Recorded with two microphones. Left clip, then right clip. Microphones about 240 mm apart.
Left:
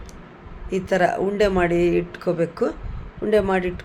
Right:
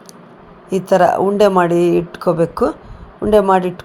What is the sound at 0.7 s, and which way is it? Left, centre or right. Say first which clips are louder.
A woman's voice: right 8 dB; centre.